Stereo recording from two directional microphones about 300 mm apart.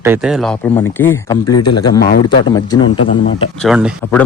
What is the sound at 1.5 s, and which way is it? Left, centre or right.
Speech, left.